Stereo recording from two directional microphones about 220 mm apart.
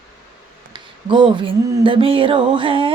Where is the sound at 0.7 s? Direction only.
20° right (ahead or behind).